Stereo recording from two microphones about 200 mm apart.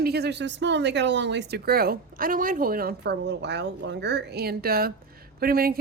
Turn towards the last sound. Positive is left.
turn(degrees=-50)  # may be behind; listen again after turning